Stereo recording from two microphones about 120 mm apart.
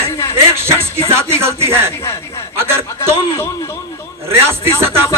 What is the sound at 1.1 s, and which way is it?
Music, 20° right (ahead or behind).